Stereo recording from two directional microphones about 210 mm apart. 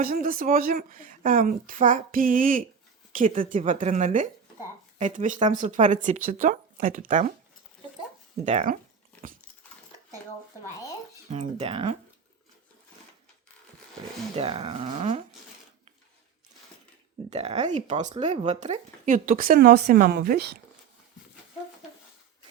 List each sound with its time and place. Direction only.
0.0 s a woman's voice: 45° right (ahead or behind)
8.4 s a woman's voice: 35° right (ahead or behind)
11.3 s speech: 30° right (ahead or behind)
14.3 s speech: 25° right (ahead or behind)
17.2 s a woman's voice: 30° right (ahead or behind); by 20.6 s 45° right (ahead or behind)